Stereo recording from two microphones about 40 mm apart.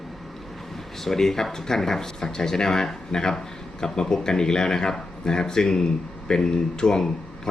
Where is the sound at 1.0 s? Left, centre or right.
Centre.